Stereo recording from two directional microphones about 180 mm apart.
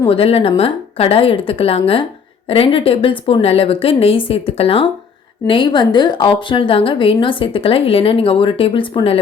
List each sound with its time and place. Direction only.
0.1 s a woman's voice: 30° left (ahead or behind)